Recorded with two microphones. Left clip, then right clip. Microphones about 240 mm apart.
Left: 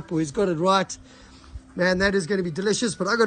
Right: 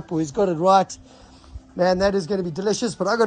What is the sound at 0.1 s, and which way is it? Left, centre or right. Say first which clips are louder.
Speech: right 2 dB; centre.